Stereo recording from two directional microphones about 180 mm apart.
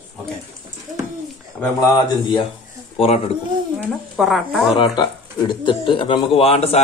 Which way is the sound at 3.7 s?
Centre (ahead or behind).